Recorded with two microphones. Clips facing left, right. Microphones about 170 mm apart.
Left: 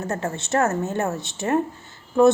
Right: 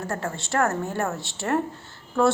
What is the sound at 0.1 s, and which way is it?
A woman's voice, 20° left (ahead or behind).